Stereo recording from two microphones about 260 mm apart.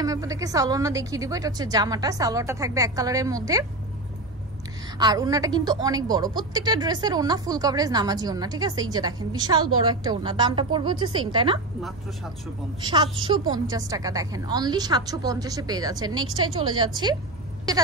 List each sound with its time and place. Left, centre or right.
0.0 s a woman's voice: centre
4.9 s a woman's voice: centre
12.8 s a woman's voice: centre